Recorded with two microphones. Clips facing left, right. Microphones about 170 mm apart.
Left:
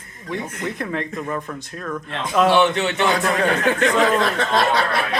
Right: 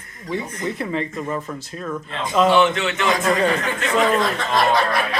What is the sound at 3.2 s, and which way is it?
Speech, 65° left (ahead or behind).